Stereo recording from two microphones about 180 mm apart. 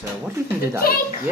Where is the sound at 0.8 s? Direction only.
55° left (ahead or behind).